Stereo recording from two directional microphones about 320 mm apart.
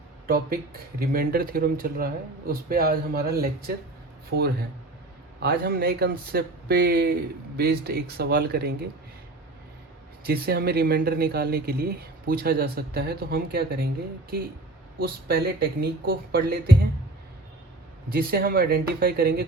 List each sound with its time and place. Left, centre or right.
0.3 s speech: right
10.2 s speech: right
18.1 s speech: right